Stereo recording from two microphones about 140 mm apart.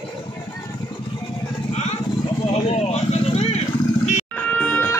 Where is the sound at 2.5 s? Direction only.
45° left (ahead or behind).